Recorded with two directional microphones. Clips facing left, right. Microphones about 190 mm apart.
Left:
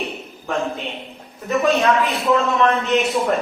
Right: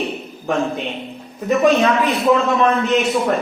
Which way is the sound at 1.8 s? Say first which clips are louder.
Right 2 dB; 15° right (ahead or behind).